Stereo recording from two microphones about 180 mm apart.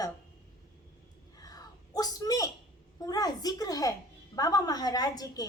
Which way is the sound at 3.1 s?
20° left (ahead or behind).